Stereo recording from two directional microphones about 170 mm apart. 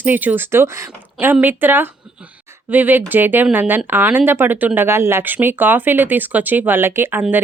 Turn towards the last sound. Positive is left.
turn(degrees=-10)  # may be behind; listen again after turning